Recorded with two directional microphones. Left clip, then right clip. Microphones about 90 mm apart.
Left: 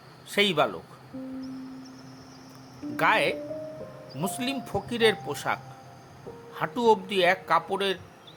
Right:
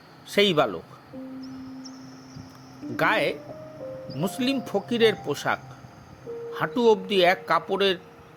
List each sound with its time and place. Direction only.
0.3 s speech: 45° right (ahead or behind)
2.9 s speech: 45° right (ahead or behind)
4.2 s speech: 35° right (ahead or behind)
6.7 s speech: 30° right (ahead or behind)
7.1 s speech: 55° right (ahead or behind)